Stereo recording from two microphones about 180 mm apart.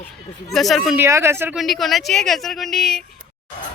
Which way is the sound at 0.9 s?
15° right (ahead or behind).